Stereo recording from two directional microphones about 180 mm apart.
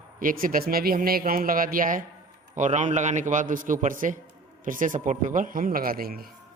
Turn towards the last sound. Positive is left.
turn(degrees=-55)  # may be behind; listen again after turning